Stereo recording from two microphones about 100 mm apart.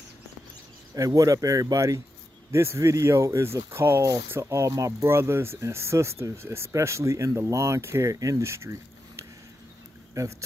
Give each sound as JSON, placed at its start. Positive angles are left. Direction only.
{"t": 0.9, "sound": "speech", "side_deg": -35}